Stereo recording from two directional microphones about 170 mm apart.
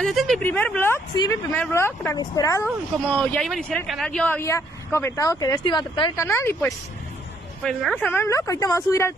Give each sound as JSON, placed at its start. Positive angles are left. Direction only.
{"t": 0.0, "sound": "speech", "side_deg": 0}
{"t": 1.1, "sound": "speech", "side_deg": 25}
{"t": 1.5, "sound": "speech", "side_deg": 15}
{"t": 2.6, "sound": "speech", "side_deg": 10}
{"t": 6.1, "sound": "speech", "side_deg": 15}